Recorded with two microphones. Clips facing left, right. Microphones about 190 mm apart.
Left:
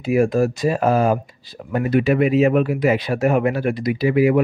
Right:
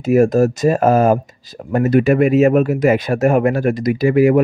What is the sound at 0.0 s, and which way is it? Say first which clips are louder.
Speech: right 5 dB; 45° right (ahead or behind).